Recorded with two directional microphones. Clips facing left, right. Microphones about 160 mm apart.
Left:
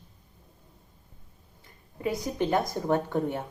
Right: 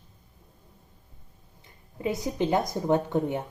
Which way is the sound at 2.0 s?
20° right (ahead or behind).